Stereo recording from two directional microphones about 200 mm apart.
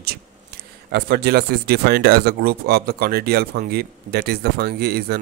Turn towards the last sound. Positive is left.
turn(degrees=-50)  # may be behind; listen again after turning